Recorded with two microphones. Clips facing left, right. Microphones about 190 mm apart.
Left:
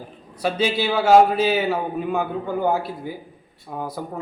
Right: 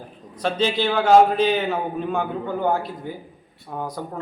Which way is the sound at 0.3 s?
10° left (ahead or behind).